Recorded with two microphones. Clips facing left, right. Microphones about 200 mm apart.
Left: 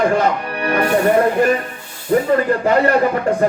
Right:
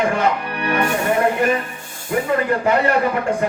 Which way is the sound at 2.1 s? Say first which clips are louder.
Left 6 dB; 40° left (ahead or behind).